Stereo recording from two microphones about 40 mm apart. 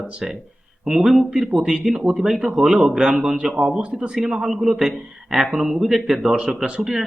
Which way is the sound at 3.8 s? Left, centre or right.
Right.